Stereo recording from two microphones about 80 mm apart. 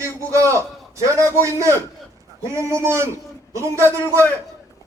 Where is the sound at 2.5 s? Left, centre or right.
Right.